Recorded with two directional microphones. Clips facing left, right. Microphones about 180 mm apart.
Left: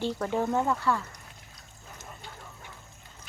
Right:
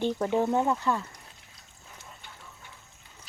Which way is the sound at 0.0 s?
20° right (ahead or behind).